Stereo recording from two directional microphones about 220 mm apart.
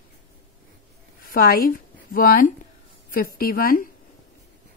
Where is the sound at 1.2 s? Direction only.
40° left (ahead or behind).